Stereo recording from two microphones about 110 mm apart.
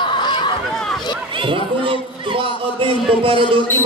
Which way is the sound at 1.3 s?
50° right (ahead or behind).